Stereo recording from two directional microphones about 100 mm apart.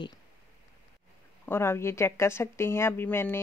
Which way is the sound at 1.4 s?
25° left (ahead or behind).